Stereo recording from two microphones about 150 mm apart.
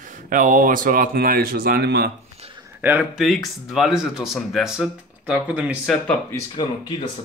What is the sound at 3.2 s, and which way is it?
Speech, centre (ahead or behind).